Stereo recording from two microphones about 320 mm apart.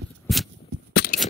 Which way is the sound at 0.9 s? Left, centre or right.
Left.